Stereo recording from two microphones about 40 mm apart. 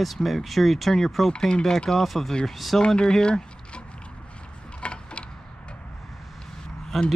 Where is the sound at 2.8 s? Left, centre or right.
Left.